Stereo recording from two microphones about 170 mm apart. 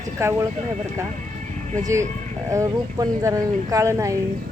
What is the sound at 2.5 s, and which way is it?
Speech, 20° right (ahead or behind).